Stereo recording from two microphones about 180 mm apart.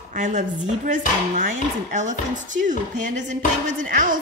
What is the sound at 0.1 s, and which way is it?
Chopping, 45° right (ahead or behind).